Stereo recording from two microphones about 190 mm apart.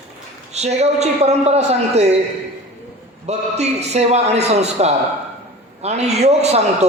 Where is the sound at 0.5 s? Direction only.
35° right (ahead or behind).